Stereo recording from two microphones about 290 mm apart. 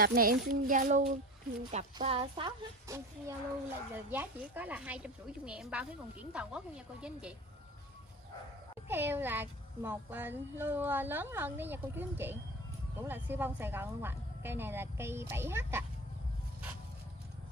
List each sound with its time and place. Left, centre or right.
0.0 s a child's voice: right; by 7.3 s centre
8.8 s speech: centre